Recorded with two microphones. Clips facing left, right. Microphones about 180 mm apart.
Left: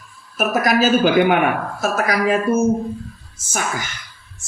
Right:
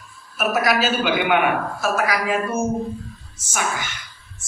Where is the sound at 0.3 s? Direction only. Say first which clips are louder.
Left 3 dB; 45° left (ahead or behind).